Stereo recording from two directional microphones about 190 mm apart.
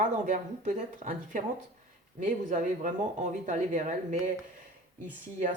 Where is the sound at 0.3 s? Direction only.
40° right (ahead or behind).